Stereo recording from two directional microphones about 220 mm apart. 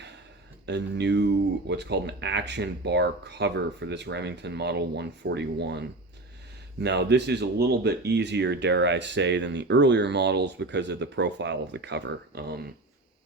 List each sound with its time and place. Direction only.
0.6 s speech: 50° right (ahead or behind)